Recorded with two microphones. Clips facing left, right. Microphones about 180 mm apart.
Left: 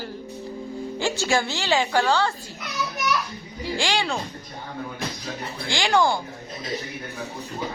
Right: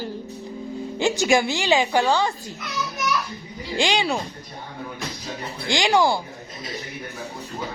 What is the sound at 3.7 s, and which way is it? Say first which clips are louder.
Speech: right 3 dB; 20° right (ahead or behind).